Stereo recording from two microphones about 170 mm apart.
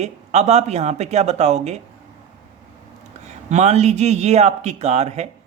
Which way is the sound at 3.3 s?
40° right (ahead or behind).